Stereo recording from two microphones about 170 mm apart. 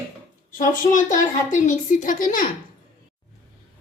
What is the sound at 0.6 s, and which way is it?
A woman's voice, 50° left (ahead or behind).